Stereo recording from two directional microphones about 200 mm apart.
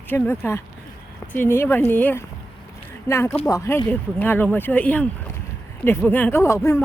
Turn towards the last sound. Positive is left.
turn(degrees=15)  # may be behind; listen again after turning